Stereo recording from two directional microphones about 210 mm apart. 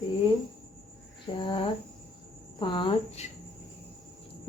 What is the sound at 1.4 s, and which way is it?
Speech, 25° left (ahead or behind).